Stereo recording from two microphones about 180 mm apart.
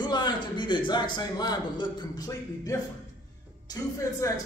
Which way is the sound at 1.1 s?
25° left (ahead or behind).